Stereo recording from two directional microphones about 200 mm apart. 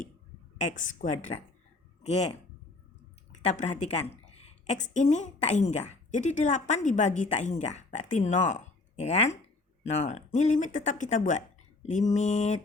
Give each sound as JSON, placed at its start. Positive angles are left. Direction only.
{"t": 0.6, "sound": "a woman's voice", "side_deg": 40}
{"t": 3.4, "sound": "a woman's voice", "side_deg": 35}